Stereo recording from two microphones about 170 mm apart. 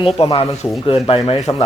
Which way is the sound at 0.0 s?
30° left (ahead or behind).